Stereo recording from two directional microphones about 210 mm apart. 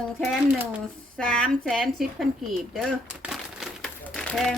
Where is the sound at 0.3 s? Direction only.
5° right (ahead or behind).